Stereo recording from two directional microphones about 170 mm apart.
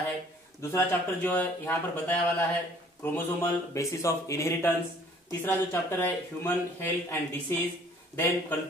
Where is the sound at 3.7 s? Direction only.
15° left (ahead or behind).